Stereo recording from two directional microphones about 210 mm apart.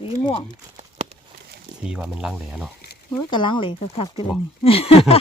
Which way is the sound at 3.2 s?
20° left (ahead or behind).